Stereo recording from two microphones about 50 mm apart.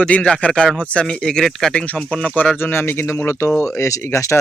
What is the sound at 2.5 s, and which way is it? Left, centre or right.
Speech, left.